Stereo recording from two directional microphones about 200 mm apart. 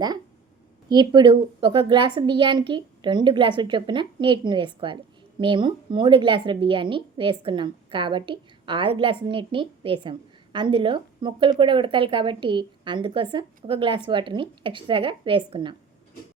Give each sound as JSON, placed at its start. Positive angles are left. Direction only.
{"t": 0.9, "sound": "a woman's voice", "side_deg": -20}